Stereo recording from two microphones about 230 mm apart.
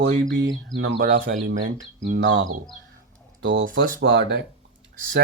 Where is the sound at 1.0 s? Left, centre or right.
Right.